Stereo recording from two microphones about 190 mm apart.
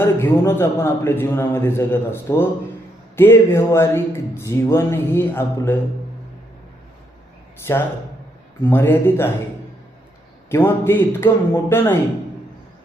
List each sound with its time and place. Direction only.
0.0 s speech: 15° left (ahead or behind)
7.7 s speech: 15° left (ahead or behind)
10.5 s speech: 10° left (ahead or behind)